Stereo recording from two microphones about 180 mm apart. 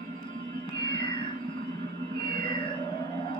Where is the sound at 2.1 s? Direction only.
30° left (ahead or behind).